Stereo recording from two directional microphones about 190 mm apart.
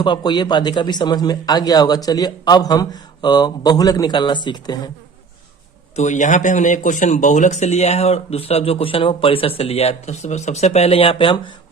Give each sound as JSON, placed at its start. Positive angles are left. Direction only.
{"t": 0.0, "sound": "a man's voice", "side_deg": 25}
{"t": 6.0, "sound": "speech", "side_deg": 40}